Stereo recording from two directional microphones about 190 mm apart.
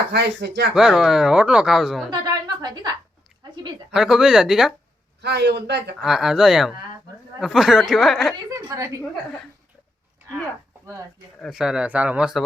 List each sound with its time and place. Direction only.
0.1 s a man's voice: 65° right (ahead or behind)
0.7 s speech: 5° right (ahead or behind)
2.0 s a sound: 20° right (ahead or behind)
3.9 s speech: 5° right (ahead or behind)
5.2 s a man's voice: 60° right (ahead or behind)
6.0 s speech: centre (ahead or behind)
8.4 s a woman's voice: 15° right (ahead or behind)
11.3 s speech: centre (ahead or behind)